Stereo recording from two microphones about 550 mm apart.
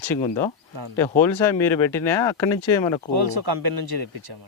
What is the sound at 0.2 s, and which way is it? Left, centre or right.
Speech, centre.